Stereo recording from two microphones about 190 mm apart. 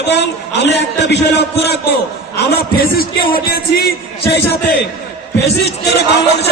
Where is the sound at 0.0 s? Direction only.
65° left (ahead or behind).